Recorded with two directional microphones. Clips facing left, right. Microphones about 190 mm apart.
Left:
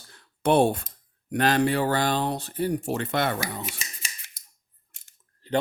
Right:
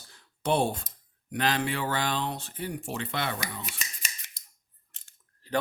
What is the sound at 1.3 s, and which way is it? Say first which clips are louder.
Speech: left 6 dB; 45° left (ahead or behind).